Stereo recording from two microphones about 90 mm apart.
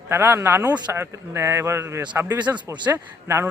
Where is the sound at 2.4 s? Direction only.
15° right (ahead or behind).